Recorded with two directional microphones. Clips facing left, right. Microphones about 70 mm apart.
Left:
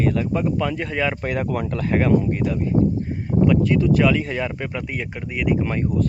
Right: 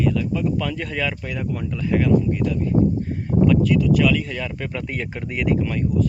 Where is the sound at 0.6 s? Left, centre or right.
Left.